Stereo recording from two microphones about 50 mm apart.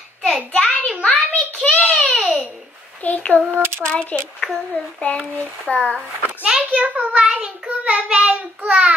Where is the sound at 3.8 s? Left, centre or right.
Centre.